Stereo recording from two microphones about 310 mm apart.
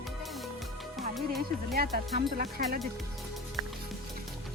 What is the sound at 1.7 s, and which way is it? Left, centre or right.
Speech, right.